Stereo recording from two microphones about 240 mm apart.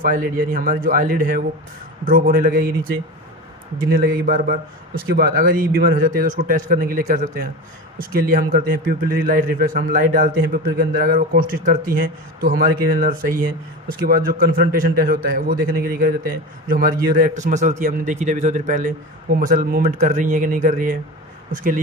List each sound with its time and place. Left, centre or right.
0.0 s a man's voice: right